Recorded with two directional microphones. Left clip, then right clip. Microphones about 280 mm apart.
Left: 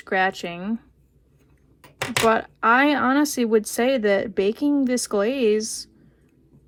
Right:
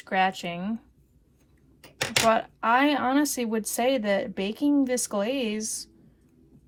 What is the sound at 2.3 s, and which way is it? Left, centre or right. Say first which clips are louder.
Speech: left 4 dB; left.